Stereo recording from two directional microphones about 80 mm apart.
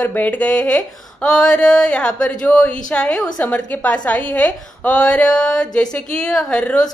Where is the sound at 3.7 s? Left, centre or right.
Left.